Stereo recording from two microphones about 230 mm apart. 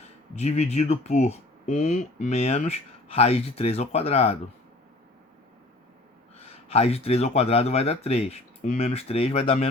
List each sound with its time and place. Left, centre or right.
0.3 s speech: left
6.3 s speech: left